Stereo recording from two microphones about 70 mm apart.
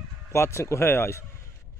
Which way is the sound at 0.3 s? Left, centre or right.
Left.